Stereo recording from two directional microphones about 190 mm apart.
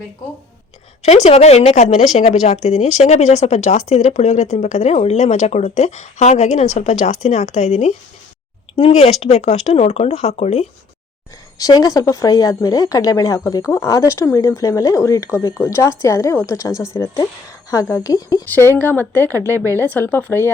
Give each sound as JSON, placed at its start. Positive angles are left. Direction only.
{"t": 1.0, "sound": "speech", "side_deg": 35}
{"t": 11.5, "sound": "speech", "side_deg": 20}
{"t": 19.3, "sound": "speech", "side_deg": -15}
{"t": 19.8, "sound": "speech", "side_deg": 10}